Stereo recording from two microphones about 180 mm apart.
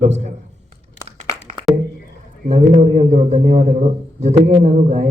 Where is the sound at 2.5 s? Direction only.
35° right (ahead or behind).